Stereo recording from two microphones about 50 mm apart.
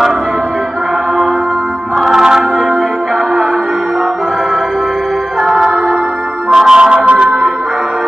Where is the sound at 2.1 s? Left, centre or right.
Centre.